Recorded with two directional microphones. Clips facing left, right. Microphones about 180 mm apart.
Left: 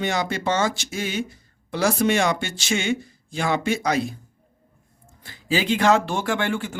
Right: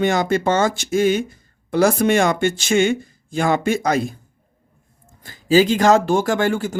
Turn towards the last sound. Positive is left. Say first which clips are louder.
# right 5 dB
turn(degrees=-40)  # may be behind; listen again after turning